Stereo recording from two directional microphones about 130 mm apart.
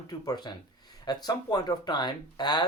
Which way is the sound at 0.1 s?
30° left (ahead or behind).